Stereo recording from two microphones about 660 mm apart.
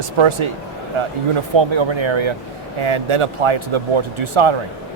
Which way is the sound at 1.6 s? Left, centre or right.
Right.